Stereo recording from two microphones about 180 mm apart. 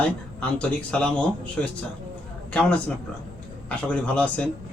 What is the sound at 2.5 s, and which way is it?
A man's voice, 5° left (ahead or behind).